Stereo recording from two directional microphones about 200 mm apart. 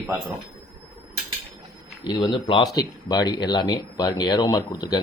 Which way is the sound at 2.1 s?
25° left (ahead or behind).